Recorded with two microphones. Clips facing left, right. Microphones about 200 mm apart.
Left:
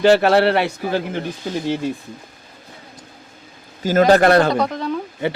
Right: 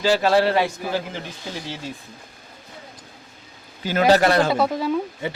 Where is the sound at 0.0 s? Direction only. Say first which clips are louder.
Left 5 dB; 60° left (ahead or behind).